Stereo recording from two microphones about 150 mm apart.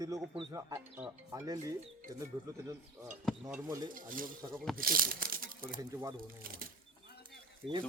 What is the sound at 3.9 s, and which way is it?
Speech, 65° right (ahead or behind).